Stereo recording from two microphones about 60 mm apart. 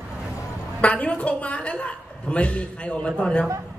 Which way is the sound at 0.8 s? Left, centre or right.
Left.